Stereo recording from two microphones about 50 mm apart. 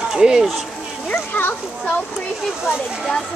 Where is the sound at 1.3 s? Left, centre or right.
Left.